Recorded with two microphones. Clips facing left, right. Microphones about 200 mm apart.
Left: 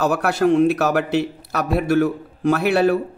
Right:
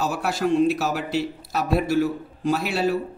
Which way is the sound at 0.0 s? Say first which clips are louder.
Left 6 dB; 60° left (ahead or behind).